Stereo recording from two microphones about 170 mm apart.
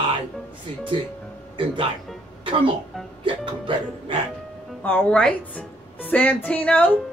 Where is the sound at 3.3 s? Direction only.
30° right (ahead or behind).